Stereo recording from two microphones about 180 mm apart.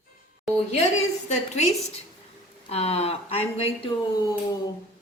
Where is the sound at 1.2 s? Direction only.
40° left (ahead or behind).